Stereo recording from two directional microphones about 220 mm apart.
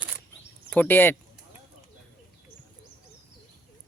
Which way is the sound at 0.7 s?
10° left (ahead or behind).